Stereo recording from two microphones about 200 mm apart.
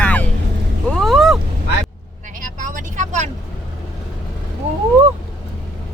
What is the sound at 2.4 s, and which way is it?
Vehicle, 40° right (ahead or behind).